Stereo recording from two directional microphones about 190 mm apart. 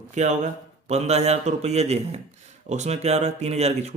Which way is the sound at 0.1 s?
40° right (ahead or behind).